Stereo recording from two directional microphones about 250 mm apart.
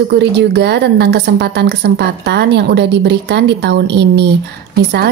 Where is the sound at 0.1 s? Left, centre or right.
Right.